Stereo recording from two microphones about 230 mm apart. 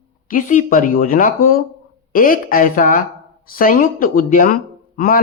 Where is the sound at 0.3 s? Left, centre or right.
Left.